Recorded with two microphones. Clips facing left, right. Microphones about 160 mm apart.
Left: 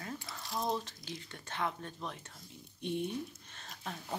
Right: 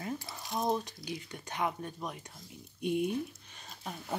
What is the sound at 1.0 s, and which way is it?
Speech, 15° right (ahead or behind).